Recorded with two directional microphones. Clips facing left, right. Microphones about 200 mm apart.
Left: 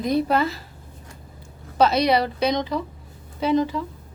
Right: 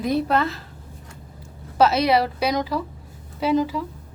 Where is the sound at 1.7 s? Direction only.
5° right (ahead or behind).